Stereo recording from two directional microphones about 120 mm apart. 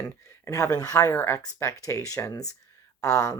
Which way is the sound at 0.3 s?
25° left (ahead or behind).